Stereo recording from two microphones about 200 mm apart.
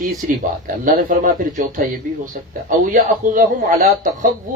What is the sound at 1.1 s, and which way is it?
Speech, 40° right (ahead or behind).